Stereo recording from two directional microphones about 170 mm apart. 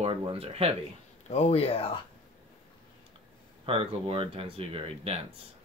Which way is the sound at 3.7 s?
35° right (ahead or behind).